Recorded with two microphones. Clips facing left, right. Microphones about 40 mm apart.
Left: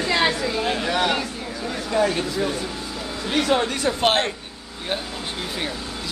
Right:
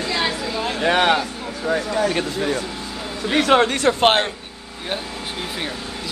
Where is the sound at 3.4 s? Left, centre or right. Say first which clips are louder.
Right 6 dB; right.